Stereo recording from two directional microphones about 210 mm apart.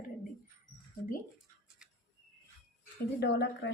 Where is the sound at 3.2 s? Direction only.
55° left (ahead or behind).